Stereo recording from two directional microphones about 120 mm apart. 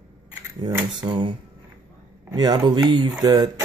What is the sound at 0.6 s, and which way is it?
Speech, 35° right (ahead or behind).